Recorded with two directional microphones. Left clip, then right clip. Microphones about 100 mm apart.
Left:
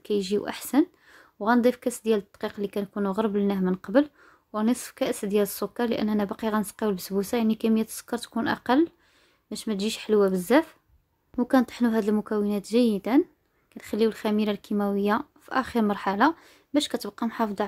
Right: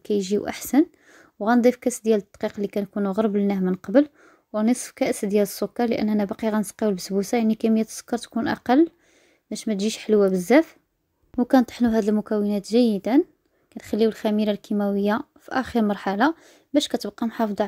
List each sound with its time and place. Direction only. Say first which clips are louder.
0.0 s speech: right 3 dB; 30° right (ahead or behind)